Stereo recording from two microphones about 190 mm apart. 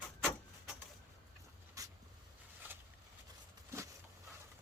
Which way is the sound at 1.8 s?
15° right (ahead or behind).